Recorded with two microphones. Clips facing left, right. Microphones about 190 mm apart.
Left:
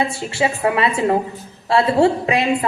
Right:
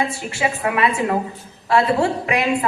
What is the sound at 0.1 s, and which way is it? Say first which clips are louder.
A woman's voice: left 3 dB; 30° left (ahead or behind).